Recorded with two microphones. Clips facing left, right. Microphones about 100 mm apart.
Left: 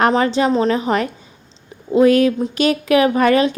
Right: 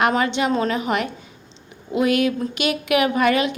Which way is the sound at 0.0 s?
35° left (ahead or behind).